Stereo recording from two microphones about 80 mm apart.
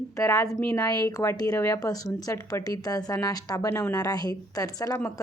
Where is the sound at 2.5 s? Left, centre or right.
Left.